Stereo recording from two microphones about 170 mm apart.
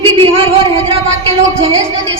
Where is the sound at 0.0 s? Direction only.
30° right (ahead or behind).